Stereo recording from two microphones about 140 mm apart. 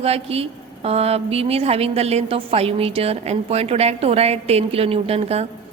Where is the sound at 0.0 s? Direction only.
45° right (ahead or behind).